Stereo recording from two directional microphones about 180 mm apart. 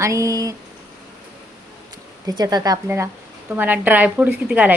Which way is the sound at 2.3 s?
20° right (ahead or behind).